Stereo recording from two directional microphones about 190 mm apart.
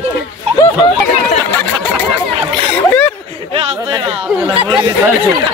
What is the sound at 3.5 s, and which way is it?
Speech, 30° right (ahead or behind).